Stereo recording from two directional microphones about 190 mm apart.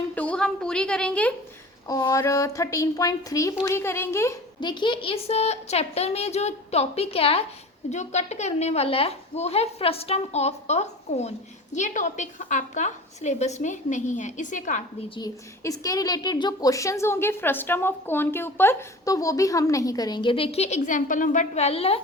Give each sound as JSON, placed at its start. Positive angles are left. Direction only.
{"t": 0.2, "sound": "a sound", "side_deg": 5}
{"t": 1.9, "sound": "a woman's voice", "side_deg": 20}
{"t": 15.1, "sound": "a woman's voice", "side_deg": 20}